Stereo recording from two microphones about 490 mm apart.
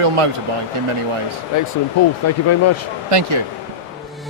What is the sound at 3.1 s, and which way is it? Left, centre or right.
Speech, right.